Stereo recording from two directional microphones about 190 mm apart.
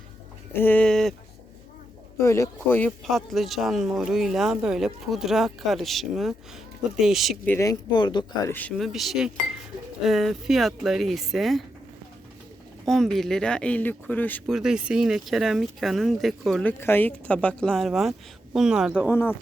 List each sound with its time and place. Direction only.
0.5 s speech: 10° left (ahead or behind)
2.1 s speech: 15° left (ahead or behind); by 7.3 s centre (ahead or behind)
7.4 s speech: 15° left (ahead or behind)
8.4 s speech: 10° left (ahead or behind)
12.8 s speech: centre (ahead or behind)
19.1 s speech: 10° left (ahead or behind)